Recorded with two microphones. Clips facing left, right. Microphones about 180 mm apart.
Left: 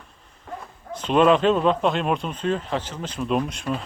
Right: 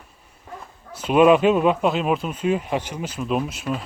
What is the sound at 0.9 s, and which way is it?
Speech, 10° right (ahead or behind).